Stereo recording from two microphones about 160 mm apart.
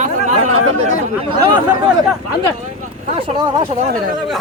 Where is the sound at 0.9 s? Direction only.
35° right (ahead or behind).